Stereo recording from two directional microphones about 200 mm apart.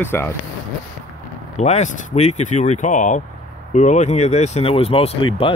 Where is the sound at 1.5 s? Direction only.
35° left (ahead or behind).